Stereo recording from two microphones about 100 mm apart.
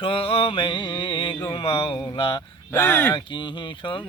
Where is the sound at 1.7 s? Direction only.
75° left (ahead or behind).